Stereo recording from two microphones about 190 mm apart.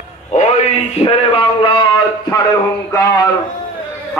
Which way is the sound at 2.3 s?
20° left (ahead or behind).